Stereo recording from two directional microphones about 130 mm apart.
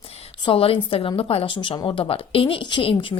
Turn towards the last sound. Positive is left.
turn(degrees=40)  # may be behind; listen again after turning